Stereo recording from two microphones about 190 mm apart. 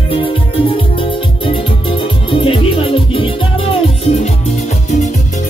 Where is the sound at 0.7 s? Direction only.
30° left (ahead or behind).